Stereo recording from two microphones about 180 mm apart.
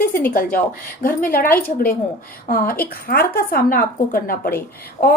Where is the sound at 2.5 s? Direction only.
50° left (ahead or behind).